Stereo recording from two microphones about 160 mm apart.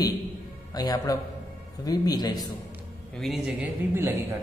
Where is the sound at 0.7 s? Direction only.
25° left (ahead or behind).